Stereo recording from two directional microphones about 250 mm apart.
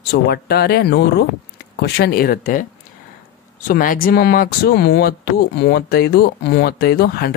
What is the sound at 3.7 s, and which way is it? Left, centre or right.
Speech, left.